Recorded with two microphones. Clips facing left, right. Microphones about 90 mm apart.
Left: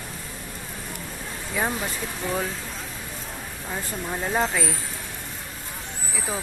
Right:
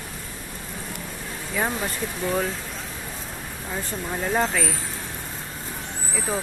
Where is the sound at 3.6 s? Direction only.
5° left (ahead or behind).